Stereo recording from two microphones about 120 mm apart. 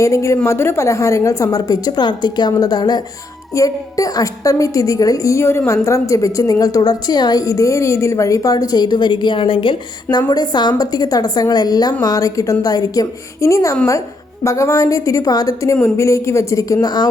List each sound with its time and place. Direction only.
0.0 s a woman's voice: 25° left (ahead or behind)